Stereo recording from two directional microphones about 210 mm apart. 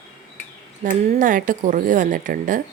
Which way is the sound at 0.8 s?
40° right (ahead or behind).